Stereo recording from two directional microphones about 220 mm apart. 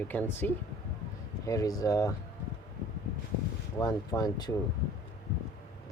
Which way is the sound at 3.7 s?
15° left (ahead or behind).